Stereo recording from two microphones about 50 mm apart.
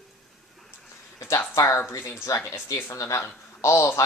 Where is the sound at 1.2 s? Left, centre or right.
Left.